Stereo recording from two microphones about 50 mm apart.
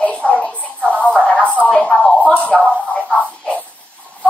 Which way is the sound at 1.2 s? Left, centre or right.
Left.